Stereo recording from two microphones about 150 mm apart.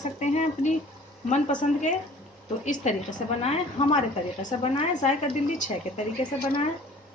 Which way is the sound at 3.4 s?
45° left (ahead or behind).